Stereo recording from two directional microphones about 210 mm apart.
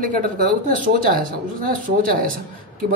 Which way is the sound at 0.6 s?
40° right (ahead or behind).